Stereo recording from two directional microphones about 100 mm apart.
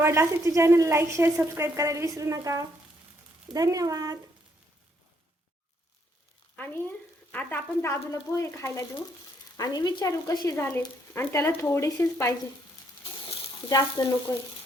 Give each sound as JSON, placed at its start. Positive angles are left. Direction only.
{"t": 0.0, "sound": "a woman's voice", "side_deg": -25}
{"t": 6.6, "sound": "speech", "side_deg": 20}
{"t": 7.8, "sound": "speech", "side_deg": 30}
{"t": 9.6, "sound": "speech", "side_deg": 40}
{"t": 10.6, "sound": "speech", "side_deg": 20}
{"t": 13.7, "sound": "speech", "side_deg": 40}